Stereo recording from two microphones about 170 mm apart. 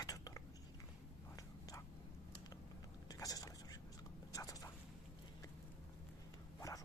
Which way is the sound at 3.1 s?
20° left (ahead or behind).